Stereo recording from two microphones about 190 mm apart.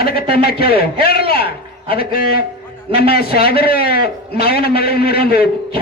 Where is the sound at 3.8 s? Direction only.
55° left (ahead or behind).